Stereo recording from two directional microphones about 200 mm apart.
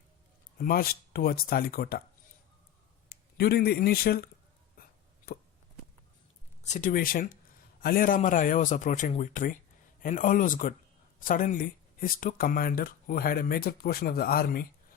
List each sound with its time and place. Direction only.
0.6 s speech: 50° left (ahead or behind)
3.1 s speech: 50° left (ahead or behind)
4.8 s hiccup: 45° left (ahead or behind)
6.6 s a man's voice: 35° left (ahead or behind)